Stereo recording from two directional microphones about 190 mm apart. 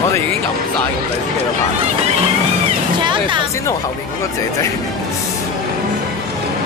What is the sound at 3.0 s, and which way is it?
Music, 25° right (ahead or behind).